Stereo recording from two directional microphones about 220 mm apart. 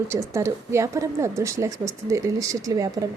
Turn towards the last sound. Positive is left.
turn(degrees=-15)  # may be behind; listen again after turning